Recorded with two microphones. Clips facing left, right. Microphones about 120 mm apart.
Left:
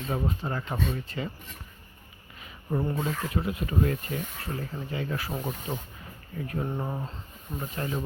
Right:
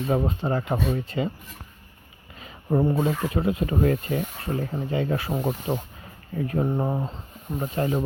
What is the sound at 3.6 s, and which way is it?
Speech, 45° right (ahead or behind).